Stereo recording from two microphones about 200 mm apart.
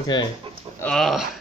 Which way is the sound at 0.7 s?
5° left (ahead or behind).